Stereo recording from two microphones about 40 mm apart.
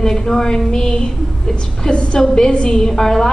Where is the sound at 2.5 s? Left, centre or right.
Left.